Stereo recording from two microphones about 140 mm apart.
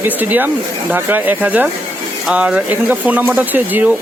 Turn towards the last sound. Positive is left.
turn(degrees=-10)  # may be behind; listen again after turning